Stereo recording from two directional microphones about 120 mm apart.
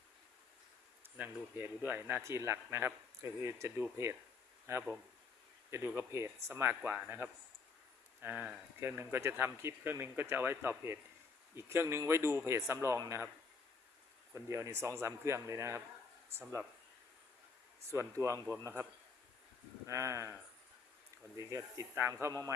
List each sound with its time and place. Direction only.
1.1 s speech: 15° right (ahead or behind)
14.3 s speech: 25° right (ahead or behind)
17.9 s speech: 25° right (ahead or behind)
19.9 s speech: 25° right (ahead or behind)
21.3 s a man's voice: 25° right (ahead or behind)